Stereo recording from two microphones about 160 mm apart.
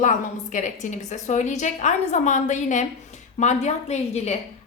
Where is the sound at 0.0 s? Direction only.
50° left (ahead or behind).